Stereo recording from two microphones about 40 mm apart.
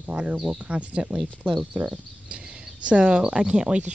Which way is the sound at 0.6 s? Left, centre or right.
Right.